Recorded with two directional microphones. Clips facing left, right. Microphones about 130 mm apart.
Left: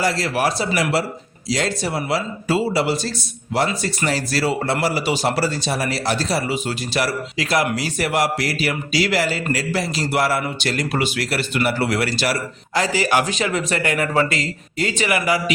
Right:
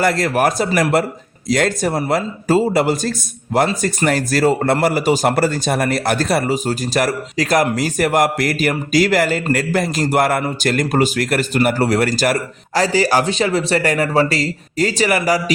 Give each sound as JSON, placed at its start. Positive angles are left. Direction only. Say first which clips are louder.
{"t": 0.0, "sound": "speech", "louder": "right 4 dB", "side_deg": -50}